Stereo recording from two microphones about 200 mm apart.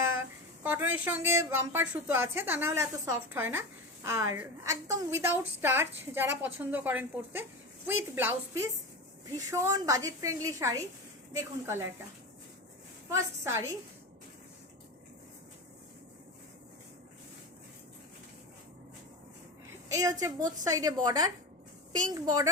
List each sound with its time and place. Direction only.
0.0 s a sound: 15° right (ahead or behind)
1.0 s a woman's voice: 10° right (ahead or behind)
13.1 s a woman's voice: 15° right (ahead or behind)
19.9 s a woman's voice: 15° right (ahead or behind)